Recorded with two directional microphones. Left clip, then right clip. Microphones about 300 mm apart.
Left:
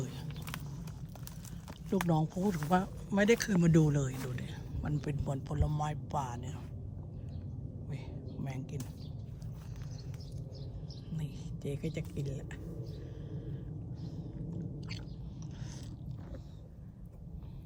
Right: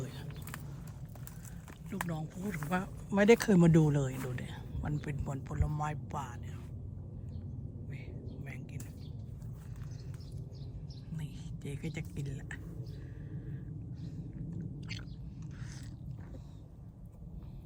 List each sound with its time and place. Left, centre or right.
0.0 s whispering: centre
1.9 s speech: centre
8.4 s whispering: centre
11.2 s a woman's voice: centre
14.6 s a sound: centre